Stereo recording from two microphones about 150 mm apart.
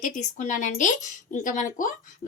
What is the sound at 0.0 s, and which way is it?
Speech, 55° left (ahead or behind).